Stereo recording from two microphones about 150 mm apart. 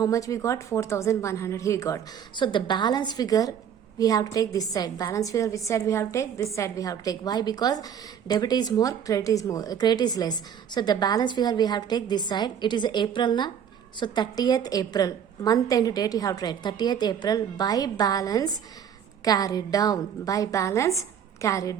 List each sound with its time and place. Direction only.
0.0 s a woman's voice: 20° left (ahead or behind)
2.4 s a woman's voice: 30° left (ahead or behind)